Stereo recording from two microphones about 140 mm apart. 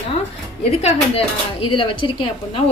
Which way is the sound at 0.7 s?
50° left (ahead or behind).